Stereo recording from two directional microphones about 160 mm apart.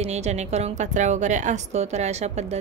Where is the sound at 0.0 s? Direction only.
45° right (ahead or behind).